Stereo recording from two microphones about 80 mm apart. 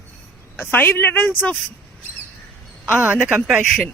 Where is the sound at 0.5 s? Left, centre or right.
Left.